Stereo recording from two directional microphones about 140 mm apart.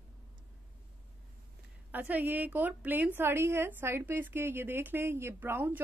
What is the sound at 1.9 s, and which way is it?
A woman's voice, 10° right (ahead or behind).